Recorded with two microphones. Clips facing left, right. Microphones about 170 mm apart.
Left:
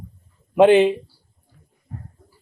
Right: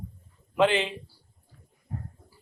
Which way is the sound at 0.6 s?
50° left (ahead or behind).